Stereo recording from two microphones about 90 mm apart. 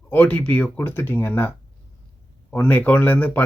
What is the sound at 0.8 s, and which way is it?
Speech, 25° left (ahead or behind).